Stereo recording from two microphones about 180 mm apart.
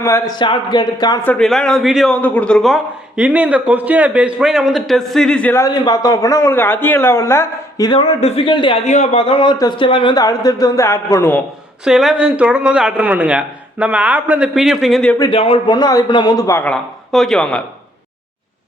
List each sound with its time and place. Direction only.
0.0 s a man's voice: 20° left (ahead or behind)
1.2 s a man's voice: 5° left (ahead or behind); by 8.0 s 20° left (ahead or behind)
8.2 s a man's voice: 35° left (ahead or behind); by 11.3 s 15° left (ahead or behind)
11.9 s a man's voice: centre (ahead or behind)
15.2 s a man's voice: 30° left (ahead or behind); by 17.6 s 5° left (ahead or behind)